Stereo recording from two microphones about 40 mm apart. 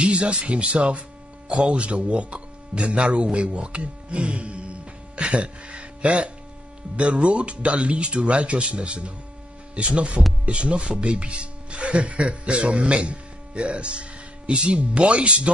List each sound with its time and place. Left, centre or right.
0.0 s speech: right